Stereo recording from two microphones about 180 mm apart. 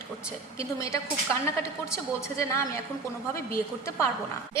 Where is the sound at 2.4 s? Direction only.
15° left (ahead or behind).